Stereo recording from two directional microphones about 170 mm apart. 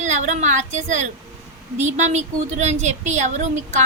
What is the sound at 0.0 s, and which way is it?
A woman's voice, 45° right (ahead or behind).